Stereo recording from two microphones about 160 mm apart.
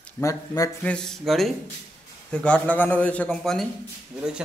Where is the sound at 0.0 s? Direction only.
20° left (ahead or behind).